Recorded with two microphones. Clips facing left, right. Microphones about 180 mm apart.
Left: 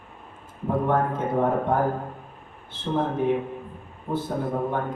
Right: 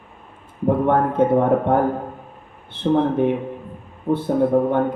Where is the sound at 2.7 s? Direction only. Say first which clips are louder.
Right 11 dB; 60° right (ahead or behind).